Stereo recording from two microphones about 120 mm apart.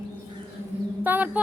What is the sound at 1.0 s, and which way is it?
Speech, 15° right (ahead or behind).